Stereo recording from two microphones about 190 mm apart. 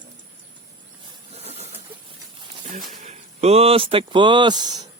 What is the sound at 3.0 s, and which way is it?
Speech, 35° right (ahead or behind).